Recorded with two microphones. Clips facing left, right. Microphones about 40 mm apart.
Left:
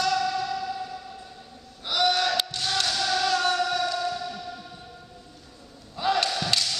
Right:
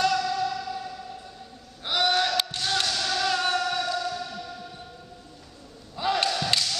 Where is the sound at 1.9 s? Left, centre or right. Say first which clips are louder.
Even; centre.